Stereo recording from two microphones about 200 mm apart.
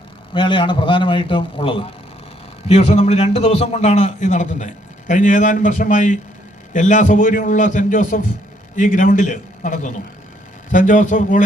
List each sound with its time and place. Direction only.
0.3 s a man's voice: 25° left (ahead or behind); by 11.4 s 40° left (ahead or behind)